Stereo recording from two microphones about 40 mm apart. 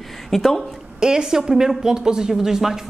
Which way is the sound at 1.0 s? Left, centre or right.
Centre.